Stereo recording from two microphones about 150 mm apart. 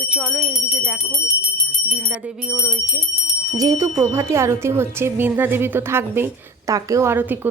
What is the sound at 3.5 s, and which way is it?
Speech, 20° right (ahead or behind).